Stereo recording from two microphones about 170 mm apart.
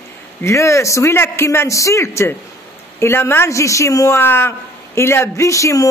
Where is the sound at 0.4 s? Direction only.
15° left (ahead or behind).